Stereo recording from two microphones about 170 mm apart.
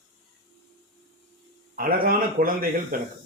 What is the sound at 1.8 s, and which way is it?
Speech, 60° right (ahead or behind).